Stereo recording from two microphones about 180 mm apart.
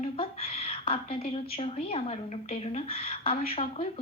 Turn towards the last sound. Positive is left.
turn(degrees=35)  # may be behind; listen again after turning